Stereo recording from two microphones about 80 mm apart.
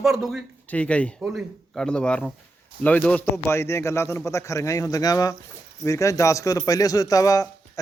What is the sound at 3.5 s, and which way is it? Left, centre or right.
Speech, left.